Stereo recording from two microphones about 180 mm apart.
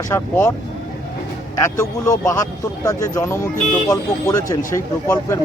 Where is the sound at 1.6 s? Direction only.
15° left (ahead or behind).